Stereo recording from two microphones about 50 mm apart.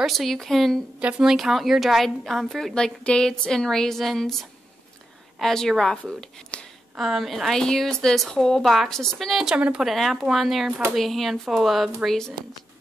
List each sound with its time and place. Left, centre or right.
0.0 s speech: centre
0.9 s a woman's voice: right
1.2 s speech: centre
2.3 s a woman's voice: centre
2.7 s a woman's voice: centre
5.4 s a woman's voice: centre
7.0 s a woman's voice: centre
9.3 s a woman's voice: centre
9.6 s speech: centre
9.8 s speech: centre
12.1 s a woman's voice: centre